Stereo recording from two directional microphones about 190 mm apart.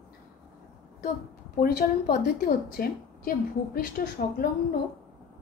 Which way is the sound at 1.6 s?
55° left (ahead or behind).